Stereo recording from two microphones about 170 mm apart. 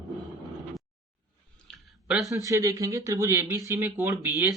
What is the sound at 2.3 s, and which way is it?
Speech, 20° right (ahead or behind).